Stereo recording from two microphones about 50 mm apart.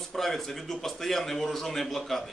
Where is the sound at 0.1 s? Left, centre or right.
Centre.